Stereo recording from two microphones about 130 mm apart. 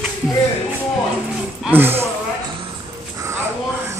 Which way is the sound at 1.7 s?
15° right (ahead or behind).